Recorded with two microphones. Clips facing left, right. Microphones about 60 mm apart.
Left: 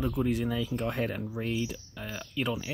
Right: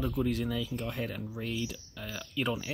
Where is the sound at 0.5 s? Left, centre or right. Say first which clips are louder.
Left 4 dB; left.